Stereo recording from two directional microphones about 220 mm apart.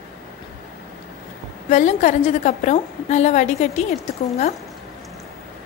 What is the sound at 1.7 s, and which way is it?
A woman's voice, 35° left (ahead or behind).